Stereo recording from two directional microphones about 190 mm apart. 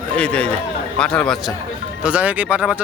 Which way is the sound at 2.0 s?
5° right (ahead or behind).